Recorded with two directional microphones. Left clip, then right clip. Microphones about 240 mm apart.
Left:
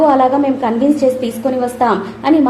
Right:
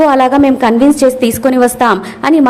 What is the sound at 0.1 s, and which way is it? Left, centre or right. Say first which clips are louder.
A woman's voice: right 3 dB; right.